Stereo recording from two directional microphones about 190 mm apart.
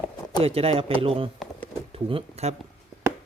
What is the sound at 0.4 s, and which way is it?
A man's voice, 30° right (ahead or behind).